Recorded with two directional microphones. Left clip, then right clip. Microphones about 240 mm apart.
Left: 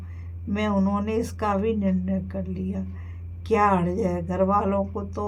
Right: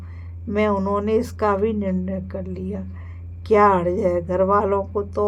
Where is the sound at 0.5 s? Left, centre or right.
Right.